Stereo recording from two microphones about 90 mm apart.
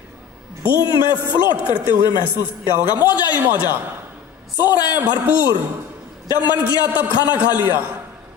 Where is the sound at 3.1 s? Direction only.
50° left (ahead or behind).